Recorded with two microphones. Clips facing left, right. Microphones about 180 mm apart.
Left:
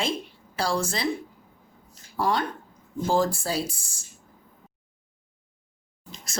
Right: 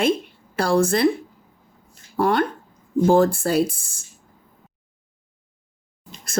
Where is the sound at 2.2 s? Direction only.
60° right (ahead or behind).